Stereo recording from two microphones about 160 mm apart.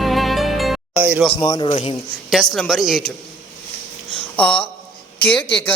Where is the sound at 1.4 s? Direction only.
25° left (ahead or behind).